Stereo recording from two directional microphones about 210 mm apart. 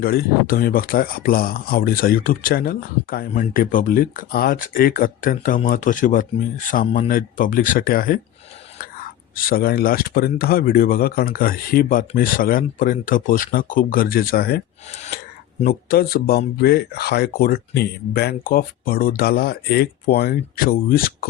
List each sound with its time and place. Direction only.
0.0 s speech: 45° left (ahead or behind)
9.3 s speech: 45° left (ahead or behind)
14.8 s speech: 30° left (ahead or behind)
15.6 s speech: 45° left (ahead or behind)